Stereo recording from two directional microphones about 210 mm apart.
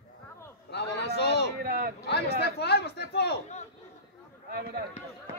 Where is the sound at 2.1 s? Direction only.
50° left (ahead or behind).